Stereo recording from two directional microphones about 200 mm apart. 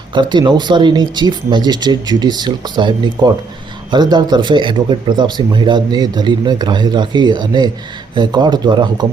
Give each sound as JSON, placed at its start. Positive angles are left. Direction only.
{"t": 0.1, "sound": "speech", "side_deg": -20}